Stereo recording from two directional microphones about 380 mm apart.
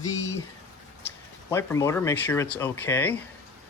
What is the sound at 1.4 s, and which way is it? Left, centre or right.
Speech, centre.